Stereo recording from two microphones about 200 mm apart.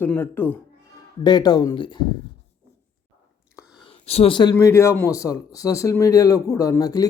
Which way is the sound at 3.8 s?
30° left (ahead or behind).